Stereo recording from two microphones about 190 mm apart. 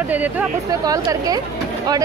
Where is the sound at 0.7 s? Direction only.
20° right (ahead or behind).